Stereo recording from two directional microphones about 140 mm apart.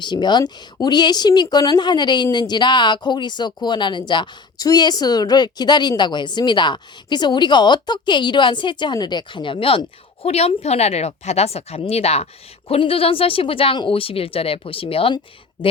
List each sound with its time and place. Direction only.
0.0 s speech: 35° left (ahead or behind)